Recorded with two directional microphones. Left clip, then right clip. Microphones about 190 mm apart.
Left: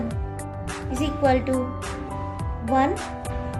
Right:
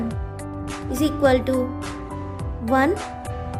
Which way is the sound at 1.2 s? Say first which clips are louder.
Right 2 dB; 55° right (ahead or behind).